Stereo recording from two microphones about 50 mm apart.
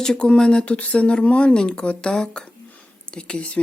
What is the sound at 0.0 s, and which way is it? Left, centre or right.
Speech, centre.